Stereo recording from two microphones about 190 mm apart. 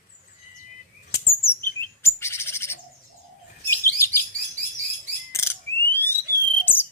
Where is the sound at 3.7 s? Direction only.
15° left (ahead or behind).